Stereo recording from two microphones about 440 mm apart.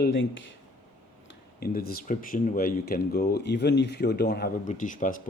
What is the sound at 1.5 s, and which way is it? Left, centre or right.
Speech, left.